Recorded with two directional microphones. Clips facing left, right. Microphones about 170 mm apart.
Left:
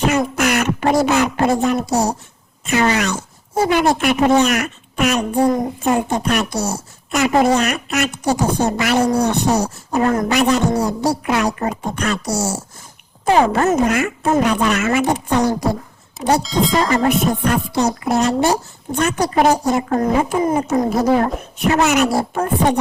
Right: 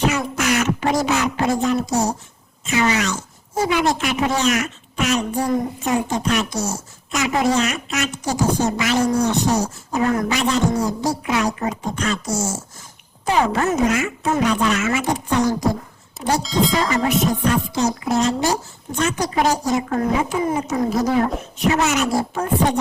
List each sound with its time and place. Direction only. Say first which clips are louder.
0.1 s speech: left 4 dB; 55° left (ahead or behind)
10.1 s speech: left 1 dB; 45° left (ahead or behind)
10.3 s speech: left 4 dB; 60° left (ahead or behind)
13.2 s speech: left 4 dB; 55° left (ahead or behind)
16.4 s speech: left 2 dB; centre (ahead or behind)
16.9 s speech: left 3 dB; 55° left (ahead or behind)
19.9 s speech: left 3 dB; 45° left (ahead or behind); by 22.4 s 65° left (ahead or behind)